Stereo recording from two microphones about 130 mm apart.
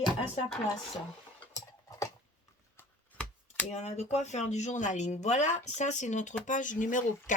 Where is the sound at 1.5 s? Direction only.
25° left (ahead or behind).